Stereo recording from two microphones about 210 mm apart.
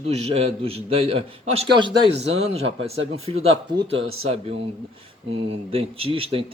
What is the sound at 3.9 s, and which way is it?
Speech, 80° right.